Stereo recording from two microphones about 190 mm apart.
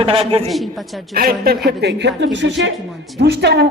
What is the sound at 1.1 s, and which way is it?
Speech, 50° right (ahead or behind).